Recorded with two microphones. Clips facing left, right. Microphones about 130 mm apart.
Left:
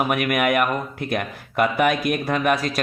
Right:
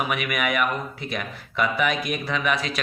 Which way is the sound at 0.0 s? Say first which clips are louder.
Left 5 dB; 50° left (ahead or behind).